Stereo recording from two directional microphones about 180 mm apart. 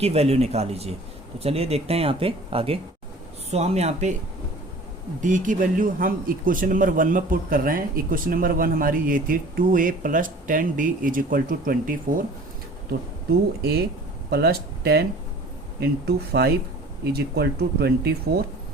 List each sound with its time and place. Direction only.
0.0 s speech: 35° right (ahead or behind)
5.2 s speech: 45° right (ahead or behind)
13.6 s speech: 65° right (ahead or behind)